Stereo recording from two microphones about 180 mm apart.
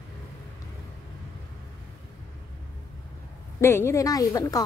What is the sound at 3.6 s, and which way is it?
A woman's voice, 15° left (ahead or behind).